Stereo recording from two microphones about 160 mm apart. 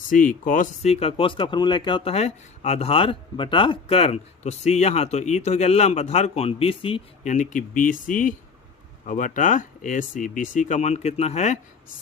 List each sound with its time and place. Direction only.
0.1 s speech: 55° left (ahead or behind); by 7.0 s 35° left (ahead or behind)
7.3 s speech: 50° left (ahead or behind)